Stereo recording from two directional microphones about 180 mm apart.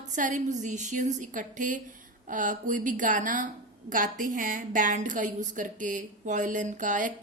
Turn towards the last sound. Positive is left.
turn(degrees=-45)  # may be behind; listen again after turning